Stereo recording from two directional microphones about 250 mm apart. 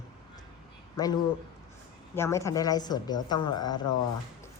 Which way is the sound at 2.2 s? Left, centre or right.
Centre.